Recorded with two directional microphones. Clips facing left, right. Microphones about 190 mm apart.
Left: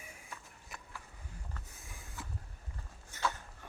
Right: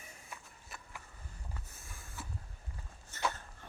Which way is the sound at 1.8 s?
15° left (ahead or behind).